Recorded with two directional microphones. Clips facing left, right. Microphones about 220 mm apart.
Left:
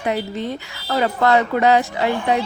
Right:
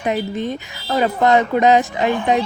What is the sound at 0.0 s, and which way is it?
A woman's voice, 15° right (ahead or behind).